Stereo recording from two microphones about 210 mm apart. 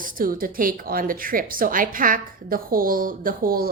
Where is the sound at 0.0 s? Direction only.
40° right (ahead or behind).